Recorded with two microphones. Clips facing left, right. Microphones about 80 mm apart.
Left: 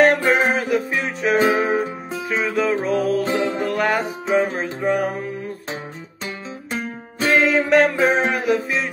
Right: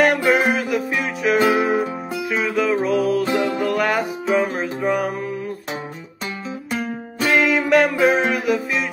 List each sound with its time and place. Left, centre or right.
0.0 s music: left
6.7 s music: left